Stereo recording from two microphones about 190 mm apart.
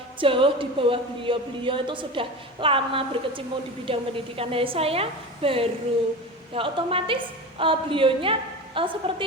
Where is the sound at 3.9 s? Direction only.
30° right (ahead or behind).